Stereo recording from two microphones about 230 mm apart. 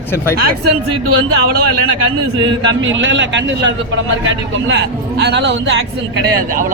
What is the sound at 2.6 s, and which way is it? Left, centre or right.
A man's voice, right.